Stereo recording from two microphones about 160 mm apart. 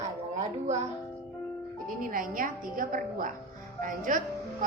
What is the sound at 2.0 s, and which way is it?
A woman's voice, 60° right (ahead or behind).